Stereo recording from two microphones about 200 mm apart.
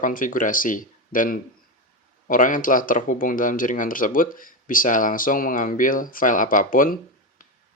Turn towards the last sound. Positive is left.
turn(degrees=45)  # may be behind; listen again after turning